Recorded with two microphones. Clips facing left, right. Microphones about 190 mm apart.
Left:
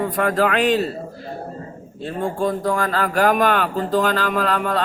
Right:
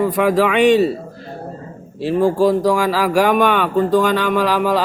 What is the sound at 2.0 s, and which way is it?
Speech, 90° right.